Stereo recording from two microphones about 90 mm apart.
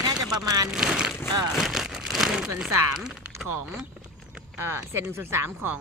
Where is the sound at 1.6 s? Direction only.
5° right (ahead or behind).